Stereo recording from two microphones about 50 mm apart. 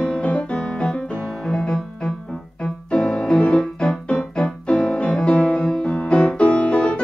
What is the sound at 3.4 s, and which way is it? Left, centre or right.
Keyboard, left.